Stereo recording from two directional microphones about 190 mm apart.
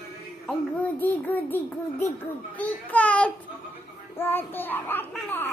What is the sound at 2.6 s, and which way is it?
A child's voice, 5° left (ahead or behind).